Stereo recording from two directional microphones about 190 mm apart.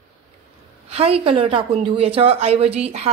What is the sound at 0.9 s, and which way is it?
Speech, 30° right (ahead or behind).